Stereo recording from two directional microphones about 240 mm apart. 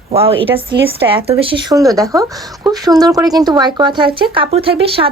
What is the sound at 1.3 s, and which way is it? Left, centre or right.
Speech, right.